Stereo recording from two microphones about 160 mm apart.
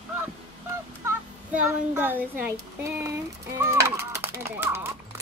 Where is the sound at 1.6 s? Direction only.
10° right (ahead or behind).